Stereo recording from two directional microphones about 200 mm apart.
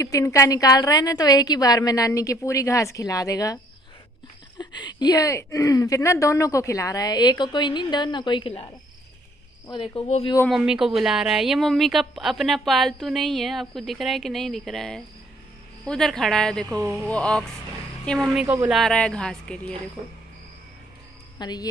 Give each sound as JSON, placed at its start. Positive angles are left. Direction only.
{"t": 0.0, "sound": "a woman's voice", "side_deg": 15}
{"t": 4.6, "sound": "a woman's voice", "side_deg": 20}
{"t": 9.7, "sound": "a woman's voice", "side_deg": 25}
{"t": 10.5, "sound": "a woman's voice", "side_deg": -5}
{"t": 18.8, "sound": "a woman's voice", "side_deg": 5}
{"t": 20.0, "sound": "cricket", "side_deg": -30}
{"t": 21.4, "sound": "speech", "side_deg": 20}